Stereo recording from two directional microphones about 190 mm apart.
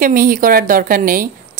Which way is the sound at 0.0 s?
45° right (ahead or behind).